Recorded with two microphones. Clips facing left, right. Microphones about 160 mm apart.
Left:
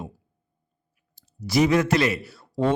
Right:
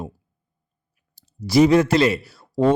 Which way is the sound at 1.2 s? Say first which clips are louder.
Right 6 dB; 30° right (ahead or behind).